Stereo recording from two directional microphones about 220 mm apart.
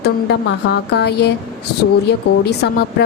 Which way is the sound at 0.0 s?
50° left (ahead or behind).